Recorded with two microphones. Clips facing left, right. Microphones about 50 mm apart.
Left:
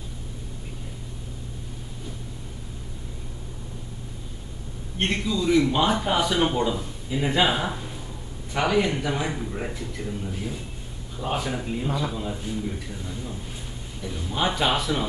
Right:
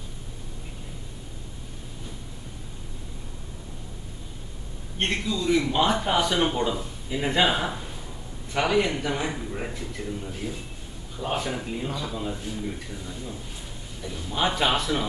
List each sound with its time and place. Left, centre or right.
4.9 s speech: centre
11.9 s speech: centre
12.2 s speech: centre